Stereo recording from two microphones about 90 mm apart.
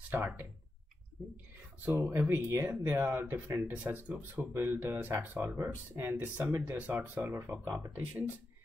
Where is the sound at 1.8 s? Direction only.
25° right (ahead or behind).